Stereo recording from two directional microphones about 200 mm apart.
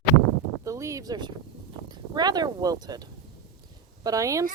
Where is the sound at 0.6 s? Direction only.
15° right (ahead or behind).